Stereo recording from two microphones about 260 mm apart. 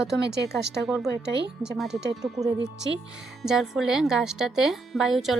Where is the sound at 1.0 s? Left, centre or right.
Right.